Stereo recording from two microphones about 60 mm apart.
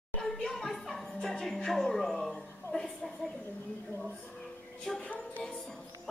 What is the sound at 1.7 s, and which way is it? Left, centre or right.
A woman's voice, centre.